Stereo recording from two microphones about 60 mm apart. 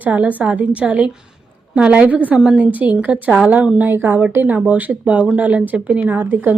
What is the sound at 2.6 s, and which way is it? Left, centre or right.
Speech, right.